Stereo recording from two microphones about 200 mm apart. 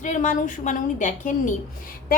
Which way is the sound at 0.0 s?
40° left (ahead or behind).